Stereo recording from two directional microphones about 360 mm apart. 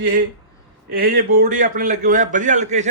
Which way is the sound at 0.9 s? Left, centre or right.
Right.